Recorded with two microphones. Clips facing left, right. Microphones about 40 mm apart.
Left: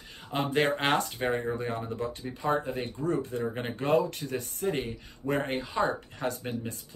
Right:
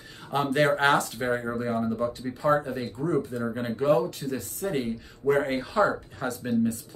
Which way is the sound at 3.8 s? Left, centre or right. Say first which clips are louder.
Right 3 dB; left.